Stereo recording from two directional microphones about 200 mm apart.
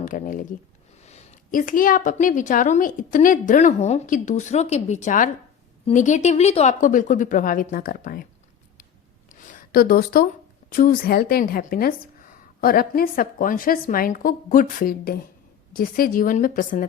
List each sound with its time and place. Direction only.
0.0 s a woman's voice: 40° left (ahead or behind)
9.3 s a sound: 40° left (ahead or behind)
10.7 s a woman's voice: 45° left (ahead or behind)